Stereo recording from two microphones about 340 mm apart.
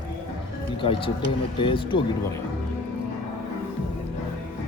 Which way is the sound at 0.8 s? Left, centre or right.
Centre.